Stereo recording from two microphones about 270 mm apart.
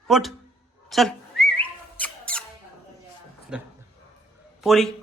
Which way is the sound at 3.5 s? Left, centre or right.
Centre.